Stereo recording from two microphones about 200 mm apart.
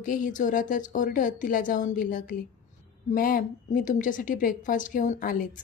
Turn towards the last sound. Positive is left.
turn(degrees=40)  # may be behind; listen again after turning